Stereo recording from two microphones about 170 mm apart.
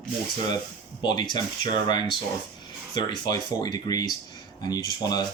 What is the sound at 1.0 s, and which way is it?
Speech, 25° left (ahead or behind).